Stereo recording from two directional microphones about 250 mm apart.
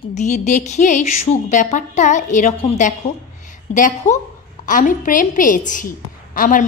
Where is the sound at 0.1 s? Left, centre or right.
Left.